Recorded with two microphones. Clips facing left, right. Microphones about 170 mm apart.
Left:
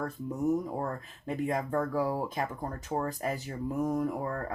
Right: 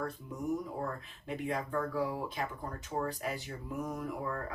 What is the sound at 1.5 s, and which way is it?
Speech, 40° left (ahead or behind).